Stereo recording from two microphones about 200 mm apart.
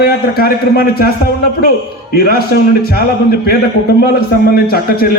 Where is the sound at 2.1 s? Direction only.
50° left (ahead or behind).